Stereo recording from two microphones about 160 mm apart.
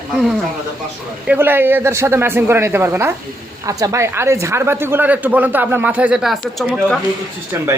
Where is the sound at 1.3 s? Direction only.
15° right (ahead or behind).